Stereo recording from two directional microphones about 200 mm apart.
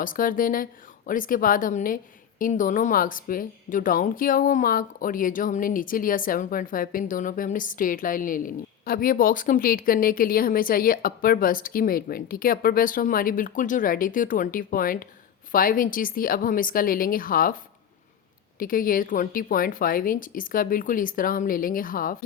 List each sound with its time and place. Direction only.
0.0 s speech: 45° left (ahead or behind)
18.6 s speech: 45° left (ahead or behind)